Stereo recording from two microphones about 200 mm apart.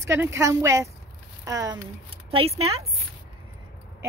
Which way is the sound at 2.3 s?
30° right (ahead or behind).